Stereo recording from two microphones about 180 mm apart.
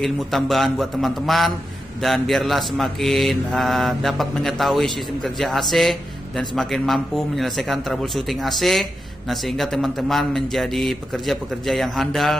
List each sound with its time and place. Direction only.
0.0 s speech: centre (ahead or behind)